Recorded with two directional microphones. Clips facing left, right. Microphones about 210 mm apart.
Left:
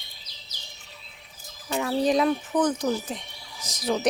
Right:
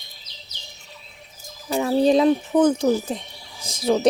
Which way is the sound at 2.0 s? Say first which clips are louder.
Right 6 dB; 30° right (ahead or behind).